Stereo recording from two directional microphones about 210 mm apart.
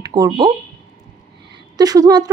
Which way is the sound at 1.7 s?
15° right (ahead or behind).